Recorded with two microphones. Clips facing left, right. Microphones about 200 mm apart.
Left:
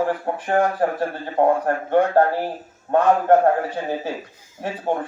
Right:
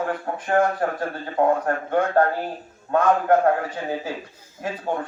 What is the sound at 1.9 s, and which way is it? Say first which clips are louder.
Speech: left 3 dB; 30° left (ahead or behind).